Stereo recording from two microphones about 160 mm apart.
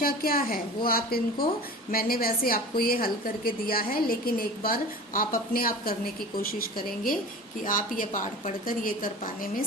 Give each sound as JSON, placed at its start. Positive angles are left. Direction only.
{"t": 0.0, "sound": "a woman's voice", "side_deg": 70}